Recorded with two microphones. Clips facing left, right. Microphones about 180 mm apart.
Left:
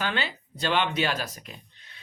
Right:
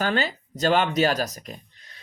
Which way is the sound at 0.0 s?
40° right (ahead or behind).